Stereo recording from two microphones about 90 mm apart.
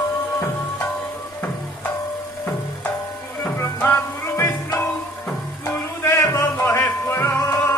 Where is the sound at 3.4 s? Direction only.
20° left (ahead or behind).